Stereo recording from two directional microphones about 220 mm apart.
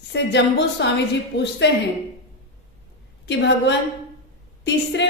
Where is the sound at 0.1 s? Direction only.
55° left (ahead or behind).